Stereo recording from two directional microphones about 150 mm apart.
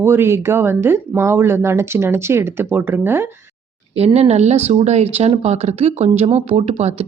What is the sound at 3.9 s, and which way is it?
Speech, 45° right (ahead or behind).